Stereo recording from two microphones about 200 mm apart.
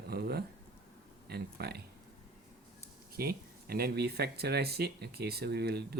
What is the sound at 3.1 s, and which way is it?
Speech, 50° right (ahead or behind).